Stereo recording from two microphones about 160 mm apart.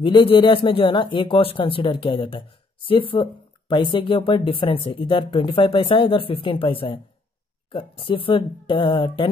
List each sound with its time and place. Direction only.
0.0 s speech: 30° left (ahead or behind)